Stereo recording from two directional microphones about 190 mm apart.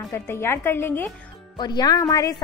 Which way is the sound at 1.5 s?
20° left (ahead or behind).